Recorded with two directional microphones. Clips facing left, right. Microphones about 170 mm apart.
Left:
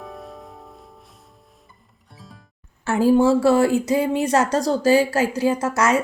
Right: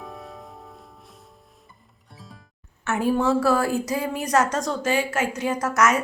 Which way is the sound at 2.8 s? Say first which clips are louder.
Left 6 dB; 30° left (ahead or behind).